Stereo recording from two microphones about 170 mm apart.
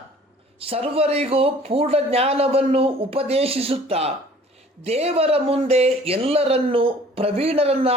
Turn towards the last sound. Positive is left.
turn(degrees=-35)  # may be behind; listen again after turning